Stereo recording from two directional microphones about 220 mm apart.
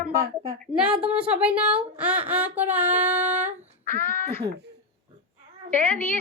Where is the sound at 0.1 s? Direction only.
15° right (ahead or behind).